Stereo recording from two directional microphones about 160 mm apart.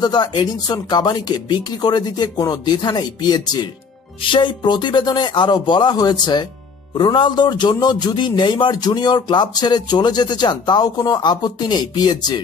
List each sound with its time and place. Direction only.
0.0 s speech: 25° left (ahead or behind)